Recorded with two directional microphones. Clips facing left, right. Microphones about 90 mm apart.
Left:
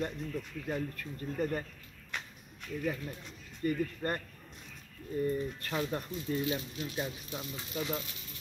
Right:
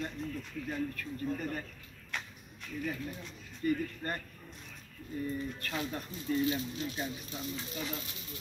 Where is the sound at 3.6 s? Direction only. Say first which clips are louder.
Right 1 dB; 35° left (ahead or behind).